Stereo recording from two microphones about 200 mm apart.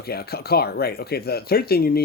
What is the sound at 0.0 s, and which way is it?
Speech, 50° left (ahead or behind).